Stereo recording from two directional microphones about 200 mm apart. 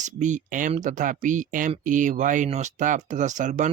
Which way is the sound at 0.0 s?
35° right (ahead or behind).